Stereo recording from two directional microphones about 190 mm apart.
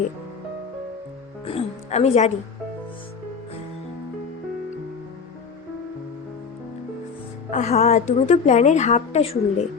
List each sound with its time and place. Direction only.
1.5 s music: 35° left (ahead or behind)
7.5 s a woman's voice: 35° left (ahead or behind)